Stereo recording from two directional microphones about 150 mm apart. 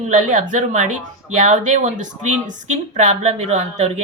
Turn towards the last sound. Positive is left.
turn(degrees=-50)  # may be behind; listen again after turning